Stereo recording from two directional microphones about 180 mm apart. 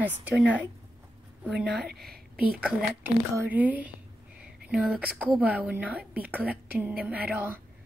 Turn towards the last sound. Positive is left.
turn(degrees=-10)  # may be behind; listen again after turning